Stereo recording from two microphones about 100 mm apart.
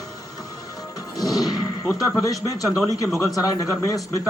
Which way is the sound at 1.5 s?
35° left (ahead or behind).